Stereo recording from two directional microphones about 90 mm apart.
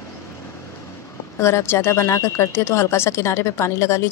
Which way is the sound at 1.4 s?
30° left (ahead or behind).